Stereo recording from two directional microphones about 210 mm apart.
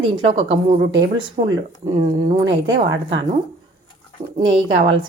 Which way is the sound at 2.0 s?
20° right (ahead or behind).